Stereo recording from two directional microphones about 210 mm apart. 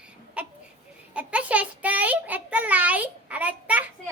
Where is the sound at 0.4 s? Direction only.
5° right (ahead or behind).